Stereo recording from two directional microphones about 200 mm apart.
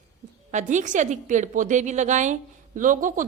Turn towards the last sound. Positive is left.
turn(degrees=-40)  # may be behind; listen again after turning